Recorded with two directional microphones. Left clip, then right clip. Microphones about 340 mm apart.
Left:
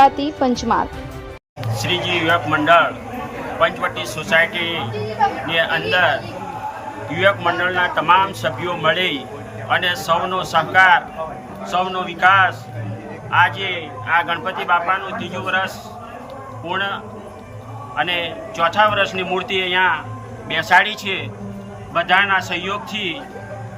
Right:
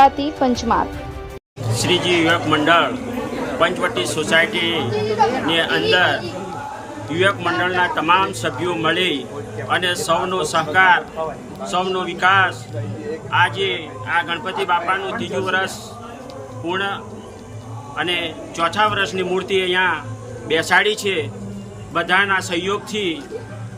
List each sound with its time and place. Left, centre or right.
0.0 s a woman's voice: centre